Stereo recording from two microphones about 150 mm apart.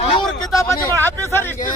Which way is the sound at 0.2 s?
20° left (ahead or behind).